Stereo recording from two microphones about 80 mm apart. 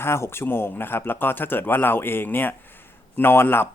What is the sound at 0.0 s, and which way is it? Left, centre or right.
Speech, left.